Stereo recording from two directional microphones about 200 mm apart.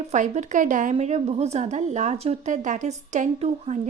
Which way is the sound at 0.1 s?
35° right (ahead or behind).